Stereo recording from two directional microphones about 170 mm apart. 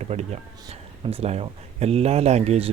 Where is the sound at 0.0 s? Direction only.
40° right (ahead or behind).